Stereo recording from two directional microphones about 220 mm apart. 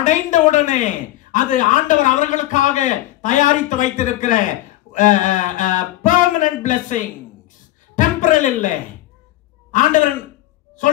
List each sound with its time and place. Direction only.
0.0 s a woman's voice: 35° left (ahead or behind)